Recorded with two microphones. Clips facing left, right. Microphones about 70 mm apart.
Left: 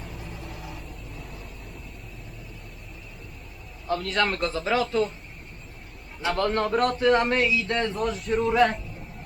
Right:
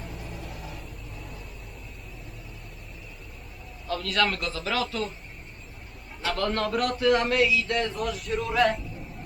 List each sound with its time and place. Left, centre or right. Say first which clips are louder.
0.0 s vehicle: even; centre
3.8 s a man's voice: left 1 dB; left
6.3 s a man's voice: left 3 dB; left